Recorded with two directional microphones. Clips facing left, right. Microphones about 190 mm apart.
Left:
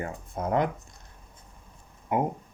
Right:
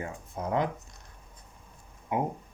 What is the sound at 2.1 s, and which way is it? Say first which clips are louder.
Speech: left 3 dB; 50° left (ahead or behind).